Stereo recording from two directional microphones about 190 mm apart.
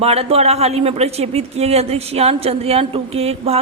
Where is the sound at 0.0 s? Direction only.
30° right (ahead or behind).